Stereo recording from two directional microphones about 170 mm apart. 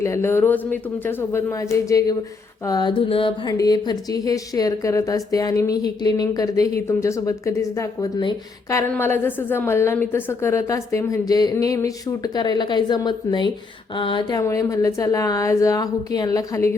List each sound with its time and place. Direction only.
0.0 s a woman's voice: 15° left (ahead or behind)
2.6 s music: 25° left (ahead or behind)
8.8 s a woman's voice: 15° left (ahead or behind)
13.9 s music: 30° left (ahead or behind)